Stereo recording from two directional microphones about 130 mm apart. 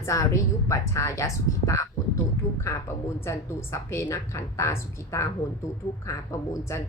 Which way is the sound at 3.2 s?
20° left (ahead or behind).